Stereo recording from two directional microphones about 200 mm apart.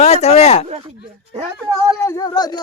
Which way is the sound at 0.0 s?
30° left (ahead or behind).